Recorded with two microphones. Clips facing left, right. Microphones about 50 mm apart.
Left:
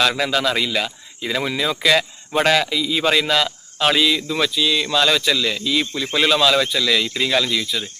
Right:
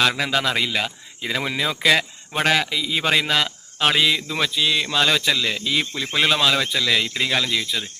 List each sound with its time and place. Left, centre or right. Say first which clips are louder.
0.2 s a man's voice: left 2 dB; right